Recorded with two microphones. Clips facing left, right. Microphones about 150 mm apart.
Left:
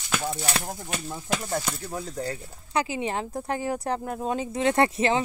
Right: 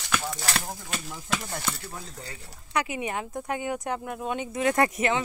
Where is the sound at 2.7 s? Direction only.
30° left (ahead or behind).